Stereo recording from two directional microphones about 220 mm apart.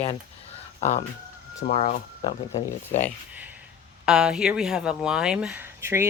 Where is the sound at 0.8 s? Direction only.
30° left (ahead or behind).